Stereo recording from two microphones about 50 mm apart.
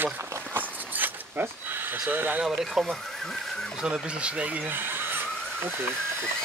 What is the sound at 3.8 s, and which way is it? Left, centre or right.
Speech, right.